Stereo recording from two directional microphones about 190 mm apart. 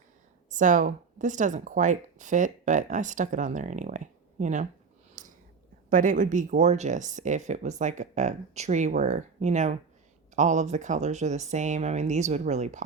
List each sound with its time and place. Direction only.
0.5 s speech: 40° right (ahead or behind)
5.2 s whispering: 40° right (ahead or behind)
5.9 s speech: 45° right (ahead or behind)